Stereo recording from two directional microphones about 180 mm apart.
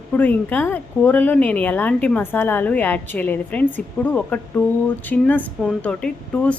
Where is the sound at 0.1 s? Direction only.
10° left (ahead or behind).